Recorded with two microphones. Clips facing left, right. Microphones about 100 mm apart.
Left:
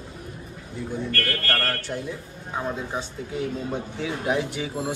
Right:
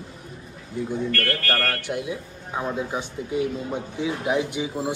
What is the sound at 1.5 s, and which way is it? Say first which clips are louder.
Speech: right 1 dB; 10° right (ahead or behind).